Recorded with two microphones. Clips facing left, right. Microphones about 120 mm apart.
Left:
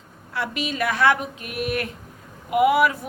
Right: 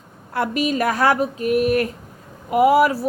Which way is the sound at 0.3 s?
45° right (ahead or behind).